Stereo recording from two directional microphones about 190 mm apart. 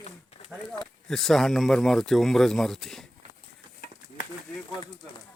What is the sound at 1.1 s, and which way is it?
Speech, centre (ahead or behind).